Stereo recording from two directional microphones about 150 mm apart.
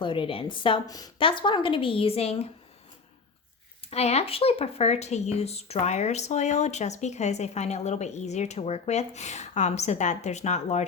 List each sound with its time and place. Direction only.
0.0 s a woman's voice: 35° left (ahead or behind)
3.8 s speech: 45° left (ahead or behind)